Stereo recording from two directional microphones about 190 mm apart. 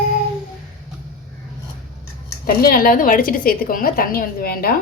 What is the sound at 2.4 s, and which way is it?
A woman's voice, 50° left (ahead or behind).